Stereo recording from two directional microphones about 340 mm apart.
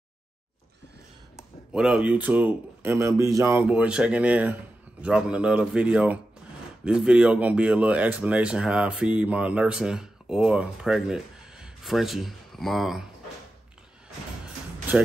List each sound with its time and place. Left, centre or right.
1.3 s speech: centre
14.9 s speech: centre